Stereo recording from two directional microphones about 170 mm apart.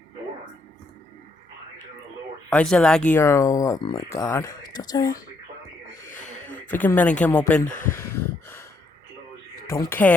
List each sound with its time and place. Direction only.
2.5 s speech: 5° left (ahead or behind)
3.1 s speech: 15° left (ahead or behind)
6.1 s a sound: 45° left (ahead or behind)
6.7 s speech: 10° left (ahead or behind)
7.9 s a sound: 15° left (ahead or behind)
9.6 s speech: 15° left (ahead or behind)